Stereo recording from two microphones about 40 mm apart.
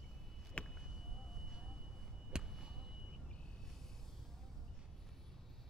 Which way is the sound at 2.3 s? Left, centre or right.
Centre.